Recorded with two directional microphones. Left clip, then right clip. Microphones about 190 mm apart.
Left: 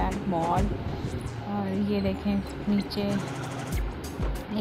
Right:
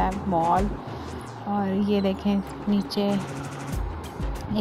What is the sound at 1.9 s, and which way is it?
Speech, 15° right (ahead or behind).